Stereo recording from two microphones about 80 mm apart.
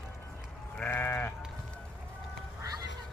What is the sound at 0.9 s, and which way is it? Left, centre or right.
Sheep, left.